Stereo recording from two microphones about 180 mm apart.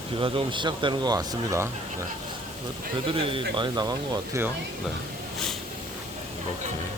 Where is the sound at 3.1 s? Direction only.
30° right (ahead or behind).